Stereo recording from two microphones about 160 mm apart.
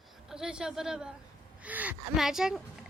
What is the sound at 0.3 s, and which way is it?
Speech, 5° right (ahead or behind).